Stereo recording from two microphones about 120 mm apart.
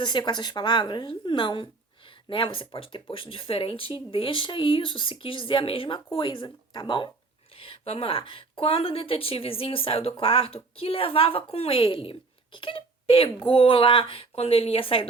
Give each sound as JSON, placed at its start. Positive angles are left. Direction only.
{"t": 0.0, "sound": "a woman's voice", "side_deg": 40}